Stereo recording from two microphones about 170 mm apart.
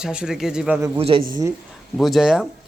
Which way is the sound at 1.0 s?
30° right (ahead or behind).